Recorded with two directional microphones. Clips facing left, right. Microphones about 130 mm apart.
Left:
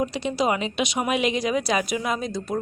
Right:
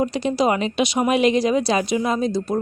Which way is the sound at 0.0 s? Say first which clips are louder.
Right 4 dB; 40° right (ahead or behind).